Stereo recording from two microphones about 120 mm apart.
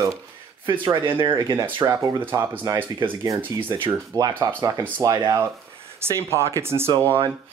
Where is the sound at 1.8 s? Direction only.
25° right (ahead or behind).